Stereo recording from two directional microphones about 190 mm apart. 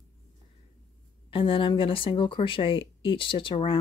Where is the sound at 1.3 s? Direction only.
30° left (ahead or behind).